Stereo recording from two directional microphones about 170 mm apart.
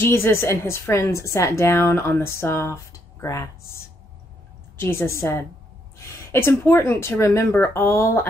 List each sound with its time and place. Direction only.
0.0 s a woman's voice: 15° left (ahead or behind)